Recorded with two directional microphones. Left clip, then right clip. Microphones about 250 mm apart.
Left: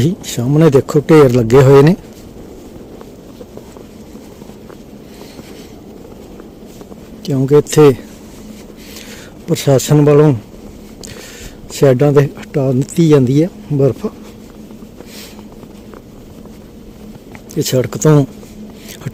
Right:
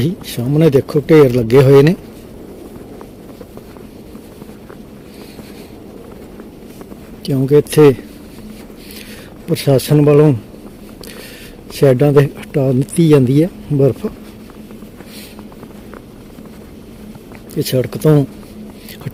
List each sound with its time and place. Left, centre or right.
0.0 s speech: centre
7.3 s speech: centre
9.5 s speech: centre
11.7 s speech: centre
17.5 s speech: centre